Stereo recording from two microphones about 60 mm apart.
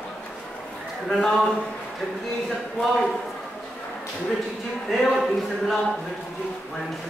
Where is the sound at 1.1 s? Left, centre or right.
Centre.